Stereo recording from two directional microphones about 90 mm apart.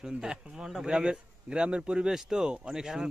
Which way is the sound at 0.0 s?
10° right (ahead or behind).